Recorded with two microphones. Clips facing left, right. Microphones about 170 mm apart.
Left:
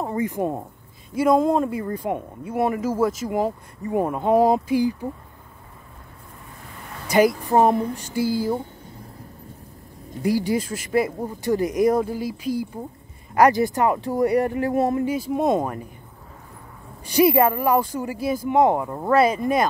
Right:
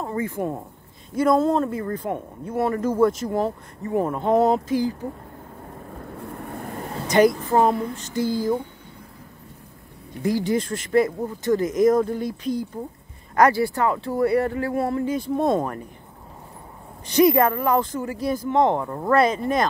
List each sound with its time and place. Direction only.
0.0 s speech: 15° left (ahead or behind)
6.1 s vehicle: 60° right (ahead or behind)
7.1 s speech: 10° left (ahead or behind)
7.5 s speech: 20° left (ahead or behind)
10.2 s speech: 10° left (ahead or behind)
15.1 s speech: 5° left (ahead or behind)
17.1 s speech: 10° left (ahead or behind)